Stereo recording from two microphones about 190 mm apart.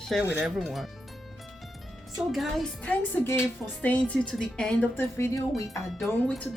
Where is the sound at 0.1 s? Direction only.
5° right (ahead or behind).